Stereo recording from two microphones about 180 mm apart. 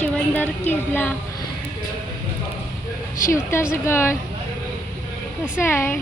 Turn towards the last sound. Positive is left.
turn(degrees=15)  # may be behind; listen again after turning